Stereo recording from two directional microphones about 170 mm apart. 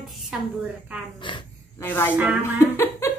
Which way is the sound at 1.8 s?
10° left (ahead or behind).